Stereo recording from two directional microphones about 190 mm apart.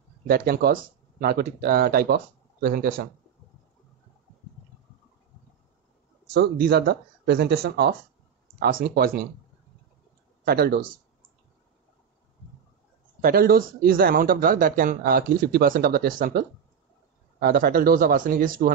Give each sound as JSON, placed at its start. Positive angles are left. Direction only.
{"t": 0.3, "sound": "speech", "side_deg": -55}
{"t": 6.3, "sound": "speech", "side_deg": -55}
{"t": 10.4, "sound": "speech", "side_deg": -55}
{"t": 13.2, "sound": "speech", "side_deg": -50}